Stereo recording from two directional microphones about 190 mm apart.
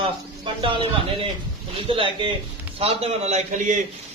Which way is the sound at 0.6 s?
25° right (ahead or behind).